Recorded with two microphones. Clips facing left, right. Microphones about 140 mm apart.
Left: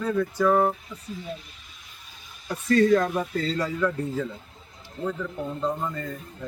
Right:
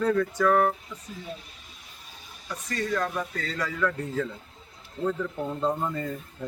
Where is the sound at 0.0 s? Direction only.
10° left (ahead or behind).